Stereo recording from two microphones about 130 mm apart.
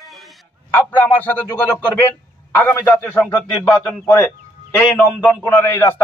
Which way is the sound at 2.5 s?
15° left (ahead or behind).